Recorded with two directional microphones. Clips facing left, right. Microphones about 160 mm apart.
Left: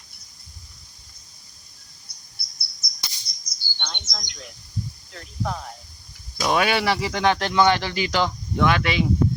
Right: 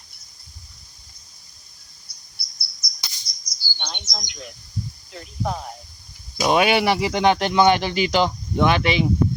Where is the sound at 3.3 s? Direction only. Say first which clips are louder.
Right 1 dB; 55° left (ahead or behind).